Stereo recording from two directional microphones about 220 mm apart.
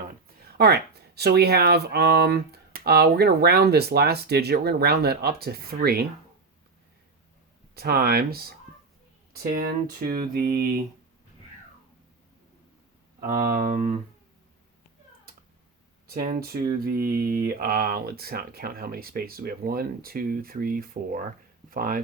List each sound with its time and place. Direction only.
0.4 s speech: 45° right (ahead or behind)
7.8 s speech: 45° right (ahead or behind)
13.1 s speech: 40° right (ahead or behind)
16.0 s speech: 40° right (ahead or behind)